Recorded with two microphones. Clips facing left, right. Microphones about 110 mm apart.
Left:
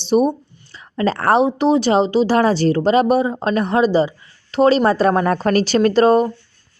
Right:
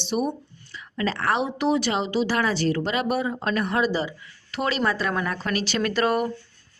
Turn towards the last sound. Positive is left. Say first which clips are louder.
# left 10 dB
turn(degrees=30)  # may be behind; listen again after turning